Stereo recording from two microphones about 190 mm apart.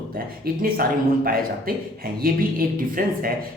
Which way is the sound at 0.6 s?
50° right (ahead or behind).